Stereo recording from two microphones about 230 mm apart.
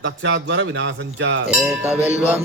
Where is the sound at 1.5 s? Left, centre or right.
Centre.